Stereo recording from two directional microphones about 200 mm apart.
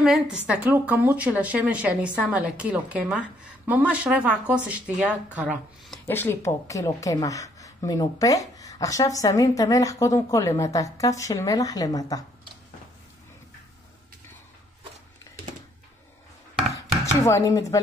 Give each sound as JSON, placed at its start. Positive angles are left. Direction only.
{"t": 0.0, "sound": "a woman's voice", "side_deg": -5}
{"t": 6.0, "sound": "speech", "side_deg": 10}
{"t": 17.0, "sound": "chopping", "side_deg": 15}